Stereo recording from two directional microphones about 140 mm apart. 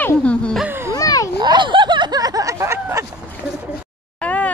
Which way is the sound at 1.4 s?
35° right (ahead or behind).